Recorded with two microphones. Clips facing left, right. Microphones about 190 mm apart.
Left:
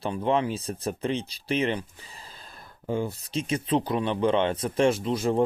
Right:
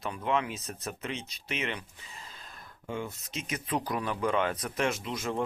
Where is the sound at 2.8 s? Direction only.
35° left (ahead or behind).